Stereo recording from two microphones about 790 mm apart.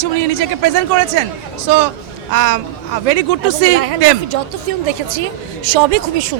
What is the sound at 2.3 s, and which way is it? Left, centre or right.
Speech, right.